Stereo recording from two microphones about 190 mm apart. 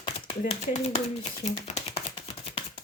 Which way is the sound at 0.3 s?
35° left (ahead or behind).